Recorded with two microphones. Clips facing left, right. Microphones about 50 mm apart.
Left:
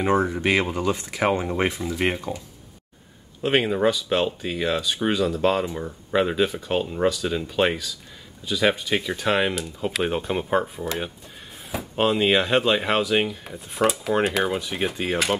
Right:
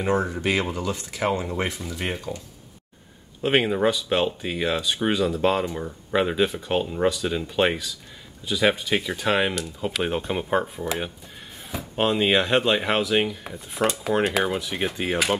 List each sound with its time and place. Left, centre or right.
0.0 s speech: left
3.4 s speech: centre